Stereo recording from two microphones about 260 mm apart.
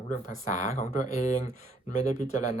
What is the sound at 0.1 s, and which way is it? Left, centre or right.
A woman's voice, left.